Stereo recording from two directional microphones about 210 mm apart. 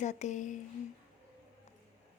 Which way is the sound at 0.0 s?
35° left (ahead or behind).